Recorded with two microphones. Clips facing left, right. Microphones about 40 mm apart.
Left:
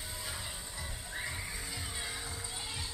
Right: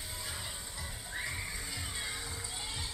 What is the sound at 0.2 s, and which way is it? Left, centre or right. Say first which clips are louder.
Music: even; centre.